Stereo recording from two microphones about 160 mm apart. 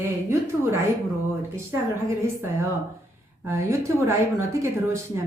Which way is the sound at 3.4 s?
15° right (ahead or behind).